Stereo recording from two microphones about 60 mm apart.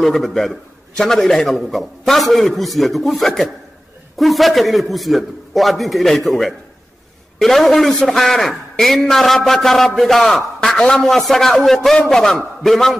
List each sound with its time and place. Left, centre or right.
0.0 s a man's voice: centre